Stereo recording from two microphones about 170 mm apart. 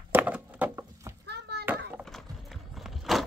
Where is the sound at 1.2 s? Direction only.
75° right (ahead or behind).